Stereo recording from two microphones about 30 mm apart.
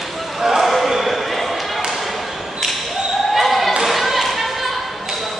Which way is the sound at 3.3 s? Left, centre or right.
Centre.